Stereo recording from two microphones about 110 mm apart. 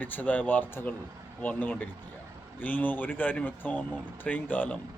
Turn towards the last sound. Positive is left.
turn(degrees=15)  # may be behind; listen again after turning